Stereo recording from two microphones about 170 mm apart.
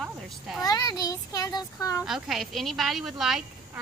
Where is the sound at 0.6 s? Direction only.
25° left (ahead or behind).